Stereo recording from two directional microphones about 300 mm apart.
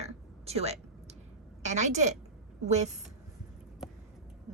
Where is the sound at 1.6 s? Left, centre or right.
Right.